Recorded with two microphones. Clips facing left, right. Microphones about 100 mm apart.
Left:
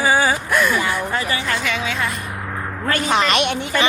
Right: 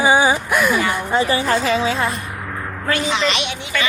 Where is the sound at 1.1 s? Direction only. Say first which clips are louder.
Right 5 dB; 30° right (ahead or behind).